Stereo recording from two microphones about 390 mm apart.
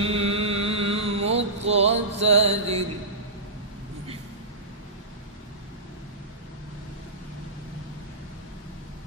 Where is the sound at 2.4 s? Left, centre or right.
Centre.